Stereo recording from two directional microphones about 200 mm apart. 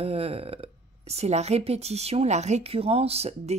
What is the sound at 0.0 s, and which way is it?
Speech, 30° right (ahead or behind).